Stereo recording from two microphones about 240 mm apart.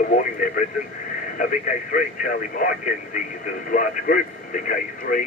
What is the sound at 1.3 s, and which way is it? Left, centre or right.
Speech, left.